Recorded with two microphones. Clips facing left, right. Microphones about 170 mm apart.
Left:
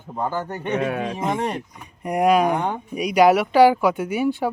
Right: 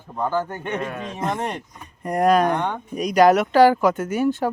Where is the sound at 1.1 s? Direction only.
5° left (ahead or behind).